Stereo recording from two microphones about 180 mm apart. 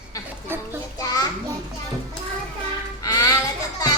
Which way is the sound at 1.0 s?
20° left (ahead or behind).